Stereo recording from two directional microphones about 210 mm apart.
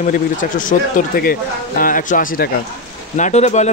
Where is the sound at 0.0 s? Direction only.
40° left (ahead or behind).